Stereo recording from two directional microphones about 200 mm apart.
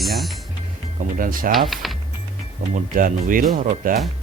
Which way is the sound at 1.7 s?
Centre (ahead or behind).